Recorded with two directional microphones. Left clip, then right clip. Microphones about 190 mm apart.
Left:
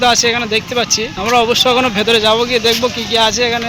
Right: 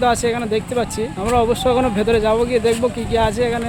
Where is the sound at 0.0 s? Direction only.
5° right (ahead or behind).